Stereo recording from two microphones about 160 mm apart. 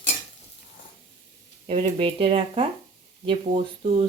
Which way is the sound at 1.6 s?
35° right (ahead or behind).